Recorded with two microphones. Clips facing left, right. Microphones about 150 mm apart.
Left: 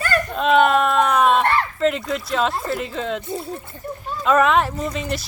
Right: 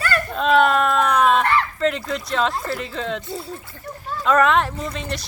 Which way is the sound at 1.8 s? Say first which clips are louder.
Left 2 dB; centre (ahead or behind).